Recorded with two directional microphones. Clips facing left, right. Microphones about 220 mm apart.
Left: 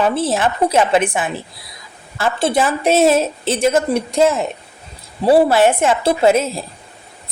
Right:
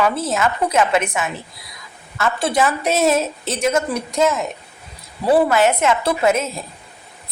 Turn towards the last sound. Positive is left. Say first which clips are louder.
# left 4 dB
turn(degrees=30)  # may be behind; listen again after turning